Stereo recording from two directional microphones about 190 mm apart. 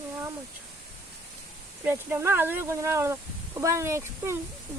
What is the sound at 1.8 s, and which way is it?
Speech, 10° right (ahead or behind).